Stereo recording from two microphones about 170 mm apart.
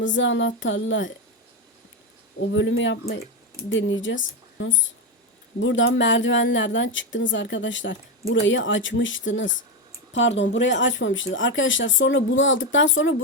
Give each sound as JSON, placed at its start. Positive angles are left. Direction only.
{"t": 0.0, "sound": "speech", "side_deg": 90}
{"t": 2.5, "sound": "speech", "side_deg": 90}